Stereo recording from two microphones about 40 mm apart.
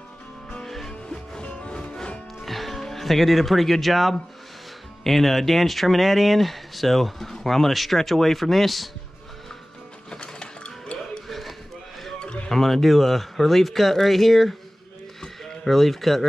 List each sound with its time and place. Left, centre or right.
0.7 s music: centre
1.0 s music: left
2.4 s speech: centre
10.1 s livestock: left
11.2 s a sound: centre
12.4 s speech: centre